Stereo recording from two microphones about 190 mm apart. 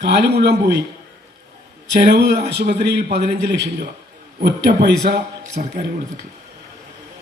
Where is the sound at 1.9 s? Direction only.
55° right (ahead or behind).